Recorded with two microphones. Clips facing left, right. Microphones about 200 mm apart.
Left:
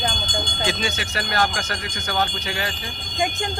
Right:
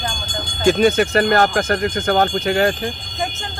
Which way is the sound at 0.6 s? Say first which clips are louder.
Right 15 dB; 50° right (ahead or behind).